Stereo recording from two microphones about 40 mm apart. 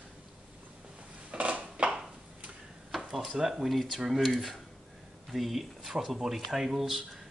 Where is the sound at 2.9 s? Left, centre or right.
Centre.